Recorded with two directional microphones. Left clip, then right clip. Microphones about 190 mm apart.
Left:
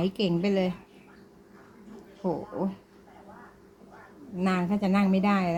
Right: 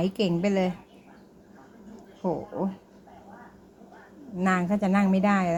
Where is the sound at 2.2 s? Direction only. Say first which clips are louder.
Right 1 dB; 5° right (ahead or behind).